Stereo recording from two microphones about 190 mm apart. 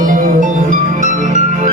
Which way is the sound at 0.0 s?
45° right (ahead or behind).